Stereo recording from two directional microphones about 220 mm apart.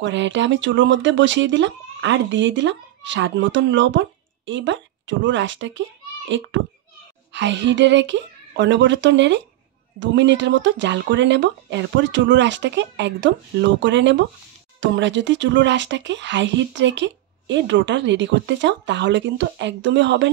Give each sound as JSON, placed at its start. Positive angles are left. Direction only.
{"t": 0.0, "sound": "a child's voice", "side_deg": -55}